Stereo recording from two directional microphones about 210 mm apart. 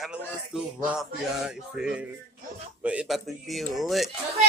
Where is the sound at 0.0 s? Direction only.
5° right (ahead or behind).